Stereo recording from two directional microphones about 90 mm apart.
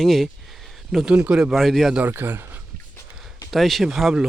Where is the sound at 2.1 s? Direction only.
25° right (ahead or behind).